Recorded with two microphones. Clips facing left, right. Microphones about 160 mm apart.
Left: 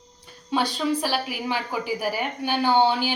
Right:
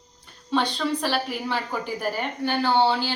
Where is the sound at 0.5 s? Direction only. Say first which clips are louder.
Left 1 dB; 10° left (ahead or behind).